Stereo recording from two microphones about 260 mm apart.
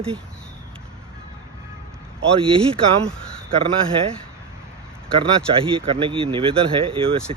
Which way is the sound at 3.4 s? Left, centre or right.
Right.